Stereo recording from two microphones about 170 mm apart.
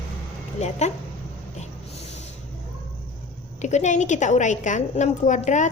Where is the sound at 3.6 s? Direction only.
45° left (ahead or behind).